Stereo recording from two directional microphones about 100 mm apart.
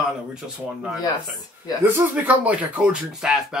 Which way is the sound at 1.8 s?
20° right (ahead or behind).